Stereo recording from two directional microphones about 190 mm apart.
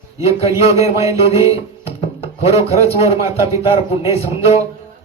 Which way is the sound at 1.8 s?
30° left (ahead or behind).